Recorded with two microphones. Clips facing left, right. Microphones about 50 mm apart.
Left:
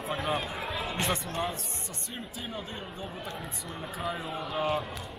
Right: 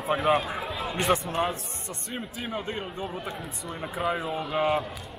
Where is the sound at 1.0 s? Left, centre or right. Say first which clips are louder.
Right 8 dB; centre.